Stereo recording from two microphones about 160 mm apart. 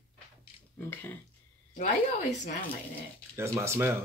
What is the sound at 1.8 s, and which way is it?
Speech, 50° left (ahead or behind).